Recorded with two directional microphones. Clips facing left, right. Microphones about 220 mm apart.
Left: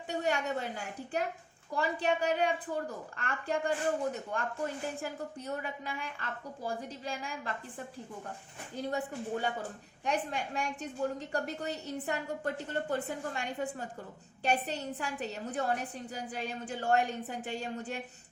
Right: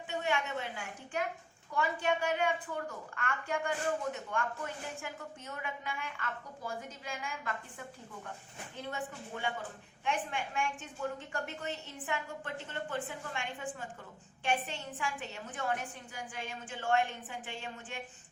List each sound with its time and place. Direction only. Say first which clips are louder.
0.1 s a woman's voice: left 3 dB; 40° left (ahead or behind)
8.7 s a woman's voice: left 6 dB; 40° left (ahead or behind)